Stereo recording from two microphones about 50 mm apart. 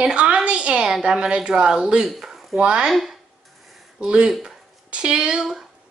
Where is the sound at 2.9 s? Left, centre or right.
Centre.